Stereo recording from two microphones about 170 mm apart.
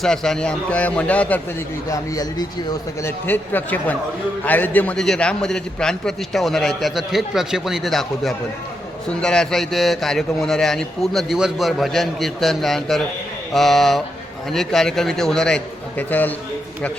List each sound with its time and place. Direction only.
0.0 s a man's voice: 5° left (ahead or behind)
1.9 s a man's voice: 20° left (ahead or behind)